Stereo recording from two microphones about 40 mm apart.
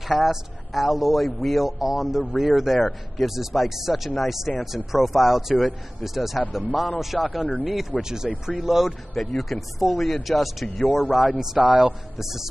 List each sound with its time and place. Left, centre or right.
0.1 s a man's voice: centre
8.0 s speech: centre
9.1 s a man's voice: centre
11.6 s a man's voice: right
12.2 s speech: centre